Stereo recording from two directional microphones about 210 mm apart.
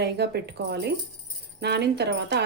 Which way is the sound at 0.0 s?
50° right (ahead or behind).